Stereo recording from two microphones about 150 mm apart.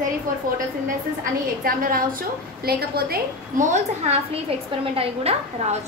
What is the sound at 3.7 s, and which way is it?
A woman's voice, 50° right (ahead or behind).